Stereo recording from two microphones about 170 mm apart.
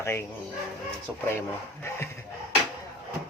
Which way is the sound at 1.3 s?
15° left (ahead or behind).